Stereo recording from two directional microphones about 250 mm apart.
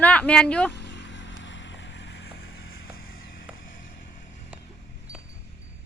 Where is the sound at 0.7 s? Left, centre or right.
Left.